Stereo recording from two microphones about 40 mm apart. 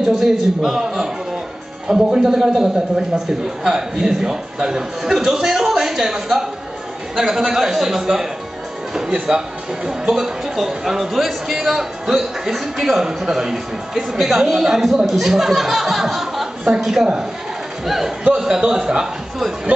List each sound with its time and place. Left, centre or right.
0.0 s a man's voice: centre
18.2 s a man's voice: centre